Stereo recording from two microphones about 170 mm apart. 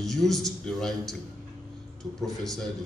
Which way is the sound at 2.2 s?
Centre (ahead or behind).